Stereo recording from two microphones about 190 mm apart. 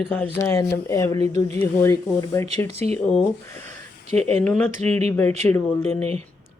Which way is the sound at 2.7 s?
35° right (ahead or behind).